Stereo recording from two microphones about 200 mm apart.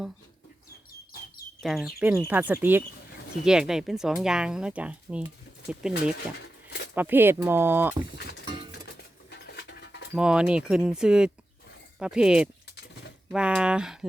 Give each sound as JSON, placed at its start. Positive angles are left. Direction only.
{"t": 1.6, "sound": "speech", "side_deg": 0}
{"t": 6.1, "sound": "a sound", "side_deg": 55}
{"t": 6.9, "sound": "speech", "side_deg": -10}
{"t": 9.6, "sound": "dog", "side_deg": 60}
{"t": 10.2, "sound": "speech", "side_deg": -5}